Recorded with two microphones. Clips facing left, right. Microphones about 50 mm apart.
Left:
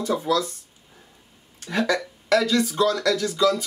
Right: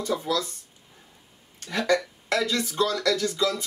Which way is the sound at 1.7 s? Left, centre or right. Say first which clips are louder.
Left 1 dB; centre.